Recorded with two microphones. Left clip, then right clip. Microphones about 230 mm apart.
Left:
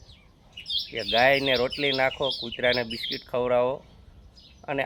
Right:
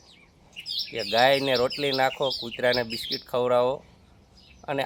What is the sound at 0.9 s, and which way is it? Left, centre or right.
Speech, centre.